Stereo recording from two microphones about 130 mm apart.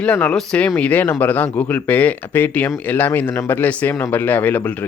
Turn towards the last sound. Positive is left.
turn(degrees=10)  # may be behind; listen again after turning